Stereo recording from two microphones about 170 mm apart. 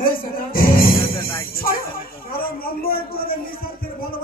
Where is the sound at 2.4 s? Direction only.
60° left (ahead or behind).